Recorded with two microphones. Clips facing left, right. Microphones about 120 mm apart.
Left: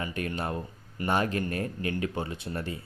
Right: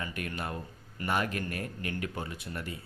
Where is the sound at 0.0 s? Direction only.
25° left (ahead or behind).